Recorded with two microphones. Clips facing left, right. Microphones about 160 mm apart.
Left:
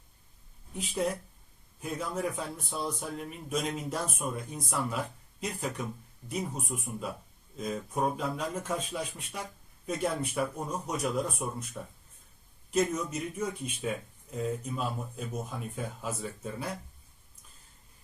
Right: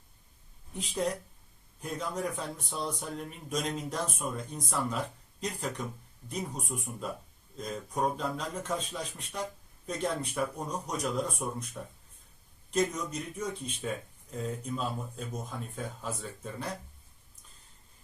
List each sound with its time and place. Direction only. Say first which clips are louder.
0.7 s a man's voice: left 1 dB; 5° left (ahead or behind)